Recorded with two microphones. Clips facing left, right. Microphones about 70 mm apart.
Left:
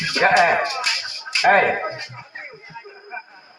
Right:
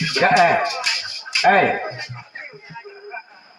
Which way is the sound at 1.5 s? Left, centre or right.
Left.